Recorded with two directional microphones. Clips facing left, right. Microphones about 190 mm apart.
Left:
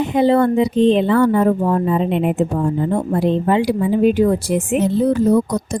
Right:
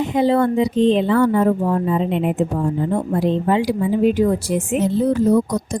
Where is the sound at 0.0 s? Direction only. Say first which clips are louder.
Left 2 dB; 60° left (ahead or behind).